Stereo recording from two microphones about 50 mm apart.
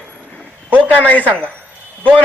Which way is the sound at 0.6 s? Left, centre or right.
Right.